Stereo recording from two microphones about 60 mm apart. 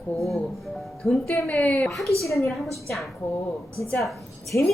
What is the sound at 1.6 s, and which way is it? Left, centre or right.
Speech, left.